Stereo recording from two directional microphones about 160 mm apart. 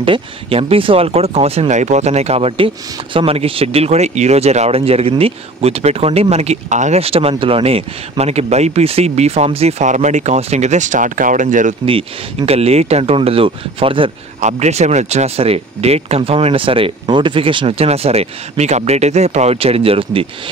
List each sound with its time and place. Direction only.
0.0 s speech: 35° right (ahead or behind); by 11.7 s 55° right (ahead or behind)
12.4 s speech: 40° right (ahead or behind)
14.4 s speech: 45° right (ahead or behind)